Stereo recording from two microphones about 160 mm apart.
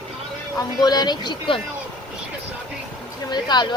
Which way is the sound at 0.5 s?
25° left (ahead or behind).